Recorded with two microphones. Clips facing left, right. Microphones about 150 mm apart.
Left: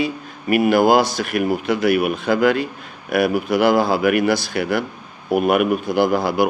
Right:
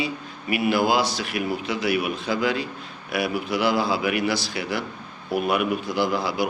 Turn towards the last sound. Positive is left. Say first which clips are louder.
# left 6 dB
turn(degrees=50)  # may be behind; listen again after turning